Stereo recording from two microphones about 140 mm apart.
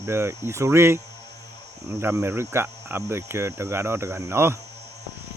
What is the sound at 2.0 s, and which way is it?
Speech, 15° right (ahead or behind).